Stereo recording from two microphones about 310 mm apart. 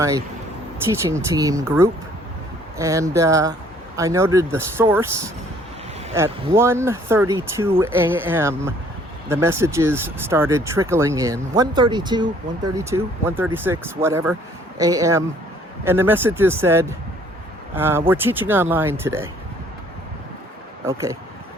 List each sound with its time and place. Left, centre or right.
0.9 s speech: centre
6.1 s speech: centre
20.8 s speech: centre